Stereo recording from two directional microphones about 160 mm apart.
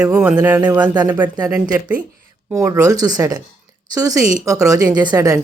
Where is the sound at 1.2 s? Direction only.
25° right (ahead or behind).